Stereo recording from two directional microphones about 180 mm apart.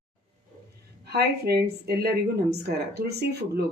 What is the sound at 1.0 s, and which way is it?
Speech, 60° right (ahead or behind).